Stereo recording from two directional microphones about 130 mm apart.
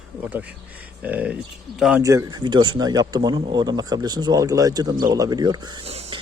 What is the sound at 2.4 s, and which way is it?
Speech, 35° right (ahead or behind).